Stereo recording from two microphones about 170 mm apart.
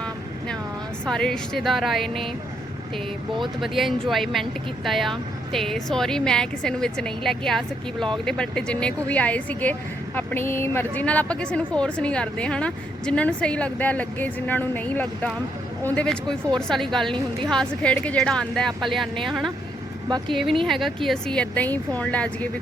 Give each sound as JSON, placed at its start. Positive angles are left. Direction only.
{"t": 1.0, "sound": "speech", "side_deg": 5}
{"t": 3.3, "sound": "speech", "side_deg": 0}
{"t": 20.1, "sound": "speech", "side_deg": -25}
{"t": 20.3, "sound": "speech", "side_deg": 0}